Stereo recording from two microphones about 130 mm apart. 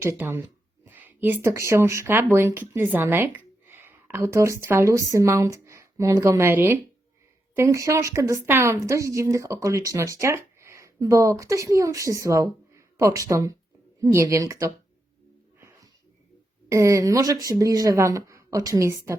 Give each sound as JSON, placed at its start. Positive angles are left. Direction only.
{"t": 0.0, "sound": "a woman's voice", "side_deg": -20}
{"t": 16.6, "sound": "a woman's voice", "side_deg": -25}